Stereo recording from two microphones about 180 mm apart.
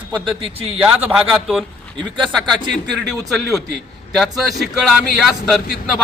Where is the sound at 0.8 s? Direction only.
5° right (ahead or behind).